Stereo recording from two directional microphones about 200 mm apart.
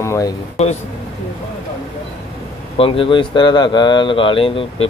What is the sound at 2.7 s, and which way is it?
Speech, 25° left (ahead or behind).